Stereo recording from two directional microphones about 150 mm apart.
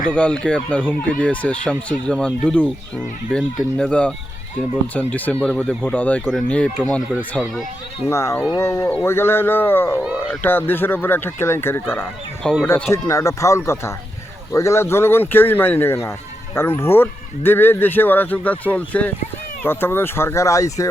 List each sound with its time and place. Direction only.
0.1 s speech: 5° left (ahead or behind)
8.1 s speech: 20° left (ahead or behind)
10.0 s speech: 5° right (ahead or behind)
10.4 s speech: 15° left (ahead or behind)
12.4 s speech: 5° left (ahead or behind)
12.9 s speech: 20° left (ahead or behind)